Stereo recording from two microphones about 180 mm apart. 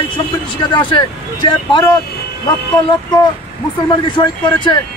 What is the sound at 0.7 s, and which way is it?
Speech, 25° left (ahead or behind).